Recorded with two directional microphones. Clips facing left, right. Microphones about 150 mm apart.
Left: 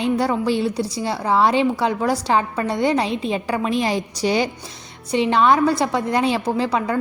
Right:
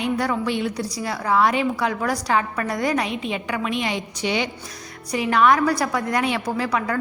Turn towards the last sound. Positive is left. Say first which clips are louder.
# left 3 dB
turn(degrees=25)  # may be behind; listen again after turning